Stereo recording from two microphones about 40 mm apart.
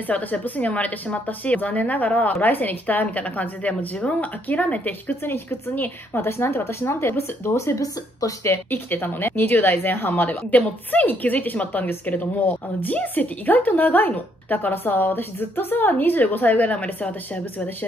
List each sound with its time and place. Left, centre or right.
0.0 s a woman's voice: left
5.2 s speech: left
8.5 s speech: left
10.5 s a woman's voice: left